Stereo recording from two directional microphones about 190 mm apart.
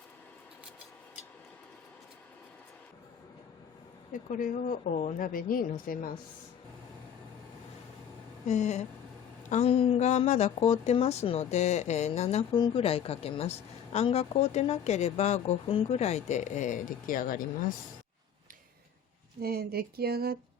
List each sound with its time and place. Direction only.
4.1 s speech: 45° left (ahead or behind)
8.4 s speech: 35° left (ahead or behind)
19.4 s speech: 55° right (ahead or behind)